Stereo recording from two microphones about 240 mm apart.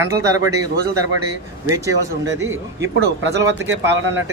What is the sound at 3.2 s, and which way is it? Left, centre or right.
Speech, right.